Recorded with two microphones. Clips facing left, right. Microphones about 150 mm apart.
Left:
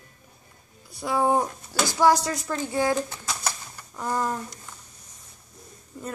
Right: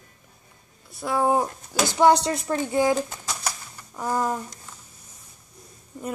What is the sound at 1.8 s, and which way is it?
Speech, 20° right (ahead or behind).